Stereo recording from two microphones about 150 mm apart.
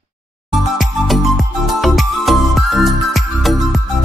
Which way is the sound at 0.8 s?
Centre (ahead or behind).